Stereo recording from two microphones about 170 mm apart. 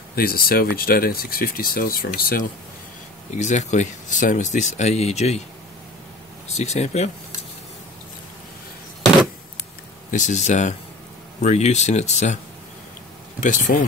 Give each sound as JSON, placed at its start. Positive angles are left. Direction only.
{"t": 0.1, "sound": "speech", "side_deg": 60}
{"t": 3.3, "sound": "speech", "side_deg": 45}
{"t": 6.6, "sound": "speech", "side_deg": 40}
{"t": 10.1, "sound": "speech", "side_deg": 45}
{"t": 13.4, "sound": "speech", "side_deg": 50}